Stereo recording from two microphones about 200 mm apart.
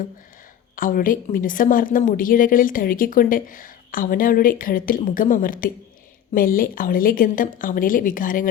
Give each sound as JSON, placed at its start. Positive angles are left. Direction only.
{"t": 0.8, "sound": "a woman's voice", "side_deg": 45}